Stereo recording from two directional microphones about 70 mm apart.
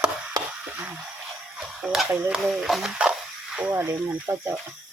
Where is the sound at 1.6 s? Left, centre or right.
Centre.